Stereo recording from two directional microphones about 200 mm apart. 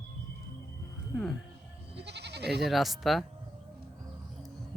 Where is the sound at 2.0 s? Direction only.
60° right (ahead or behind).